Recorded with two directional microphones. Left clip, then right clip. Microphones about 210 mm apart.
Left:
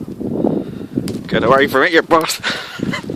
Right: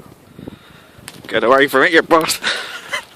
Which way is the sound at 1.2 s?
Centre (ahead or behind).